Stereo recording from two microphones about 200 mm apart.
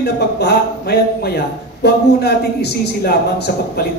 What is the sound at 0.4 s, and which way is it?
A man's voice, 55° left (ahead or behind).